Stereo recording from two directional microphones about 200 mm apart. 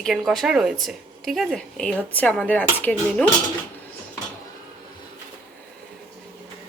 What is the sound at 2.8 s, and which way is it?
Dishes, 10° left (ahead or behind).